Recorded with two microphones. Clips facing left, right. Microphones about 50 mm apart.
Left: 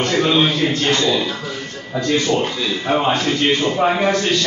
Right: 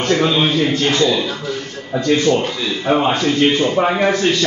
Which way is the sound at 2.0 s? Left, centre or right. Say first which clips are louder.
Right 3 dB; right.